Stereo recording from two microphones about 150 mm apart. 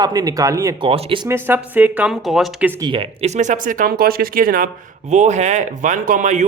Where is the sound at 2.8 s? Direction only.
35° right (ahead or behind); by 4.7 s 70° right (ahead or behind).